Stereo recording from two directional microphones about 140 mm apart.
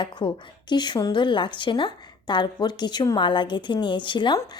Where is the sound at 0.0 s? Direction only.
35° left (ahead or behind).